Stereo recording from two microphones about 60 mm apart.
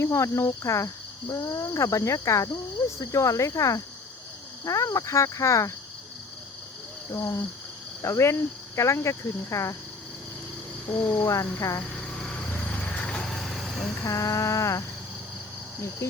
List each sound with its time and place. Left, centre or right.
0.0 s speech: left
7.1 s speech: left
10.8 s speech: left
11.2 s speech: left
11.9 s a sound: centre
12.5 s vehicle: left
13.3 s vehicle: centre
14.0 s speech: left